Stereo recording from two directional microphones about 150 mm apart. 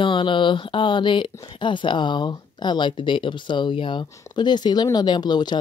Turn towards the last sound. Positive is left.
turn(degrees=30)  # may be behind; listen again after turning